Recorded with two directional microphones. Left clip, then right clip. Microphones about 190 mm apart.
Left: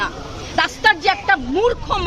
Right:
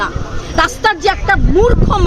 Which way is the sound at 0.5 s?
20° right (ahead or behind).